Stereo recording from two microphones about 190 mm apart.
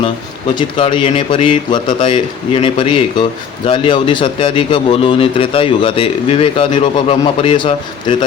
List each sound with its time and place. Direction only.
0.8 s a man's voice: 25° left (ahead or behind)